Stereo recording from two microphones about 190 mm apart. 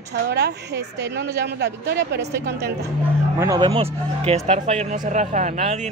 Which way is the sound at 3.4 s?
20° right (ahead or behind).